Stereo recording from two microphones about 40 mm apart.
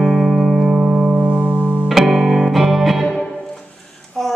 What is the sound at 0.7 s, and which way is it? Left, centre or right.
Music, right.